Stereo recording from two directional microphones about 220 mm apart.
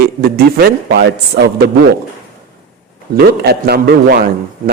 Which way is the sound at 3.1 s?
45° right (ahead or behind).